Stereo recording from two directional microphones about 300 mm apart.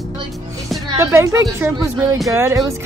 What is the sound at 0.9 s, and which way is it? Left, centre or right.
A woman's voice, centre.